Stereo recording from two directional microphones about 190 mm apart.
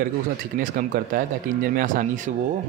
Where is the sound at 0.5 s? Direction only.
45° right (ahead or behind).